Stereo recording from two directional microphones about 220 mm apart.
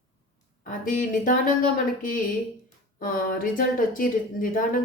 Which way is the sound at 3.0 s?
40° left (ahead or behind).